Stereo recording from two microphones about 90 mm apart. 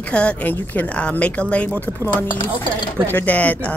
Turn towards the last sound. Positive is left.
turn(degrees=15)  # may be behind; listen again after turning